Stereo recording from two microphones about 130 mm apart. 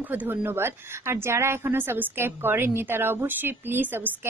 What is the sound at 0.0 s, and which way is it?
Speech, 15° right (ahead or behind).